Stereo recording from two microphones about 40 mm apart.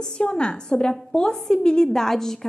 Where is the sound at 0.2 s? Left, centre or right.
Left.